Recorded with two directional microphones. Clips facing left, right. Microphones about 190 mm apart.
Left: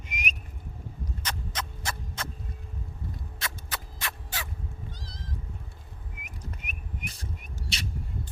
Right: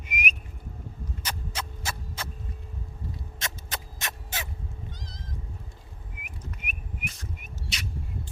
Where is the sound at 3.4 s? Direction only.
20° right (ahead or behind).